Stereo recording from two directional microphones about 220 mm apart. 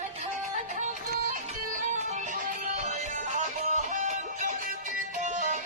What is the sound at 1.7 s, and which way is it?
Music, 35° right (ahead or behind).